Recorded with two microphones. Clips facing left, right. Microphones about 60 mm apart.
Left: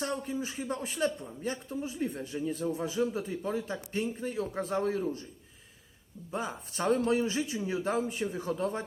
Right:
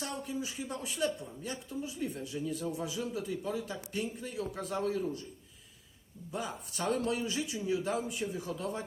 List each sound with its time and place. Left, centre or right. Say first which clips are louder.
0.0 s speech: left 4 dB; left
6.3 s speech: left 3 dB; left